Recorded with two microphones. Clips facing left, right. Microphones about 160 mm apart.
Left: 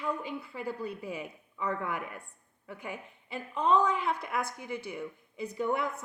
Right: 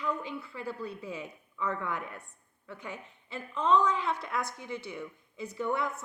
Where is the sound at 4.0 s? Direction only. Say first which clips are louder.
Left 1 dB; 55° left (ahead or behind).